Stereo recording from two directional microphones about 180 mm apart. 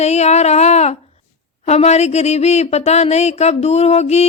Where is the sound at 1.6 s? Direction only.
35° left (ahead or behind).